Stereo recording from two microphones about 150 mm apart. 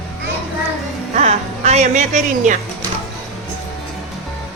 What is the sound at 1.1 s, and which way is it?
Speech, 50° right (ahead or behind).